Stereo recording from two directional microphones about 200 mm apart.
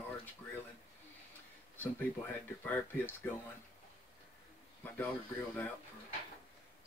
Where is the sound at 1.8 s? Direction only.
10° left (ahead or behind).